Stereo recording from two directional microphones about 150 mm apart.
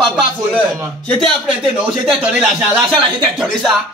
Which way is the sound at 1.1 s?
5° left (ahead or behind).